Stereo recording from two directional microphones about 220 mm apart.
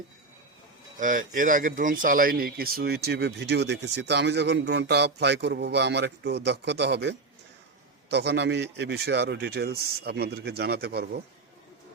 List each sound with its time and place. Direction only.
0.9 s speech: 35° right (ahead or behind)